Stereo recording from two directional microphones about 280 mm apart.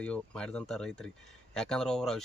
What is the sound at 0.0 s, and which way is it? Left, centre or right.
Speech, centre.